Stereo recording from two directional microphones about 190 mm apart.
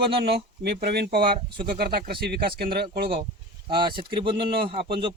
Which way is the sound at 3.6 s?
25° right (ahead or behind).